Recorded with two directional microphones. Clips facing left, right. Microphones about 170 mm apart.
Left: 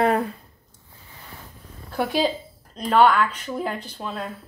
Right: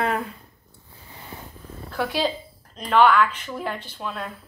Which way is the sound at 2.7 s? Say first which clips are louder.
Even; 40° left (ahead or behind).